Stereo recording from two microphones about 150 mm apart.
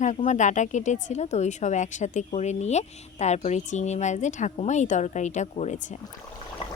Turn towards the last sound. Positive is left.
turn(degrees=50)  # may be behind; listen again after turning